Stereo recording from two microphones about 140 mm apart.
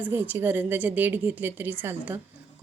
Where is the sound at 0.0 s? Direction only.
15° right (ahead or behind).